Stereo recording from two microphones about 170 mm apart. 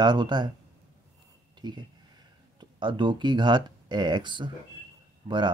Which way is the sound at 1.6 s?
25° right (ahead or behind).